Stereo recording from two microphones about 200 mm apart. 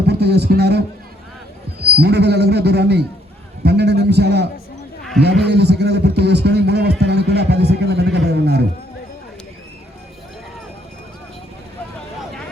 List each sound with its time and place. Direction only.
0.1 s a man's voice: 55° right (ahead or behind)
2.0 s a man's voice: 55° right (ahead or behind)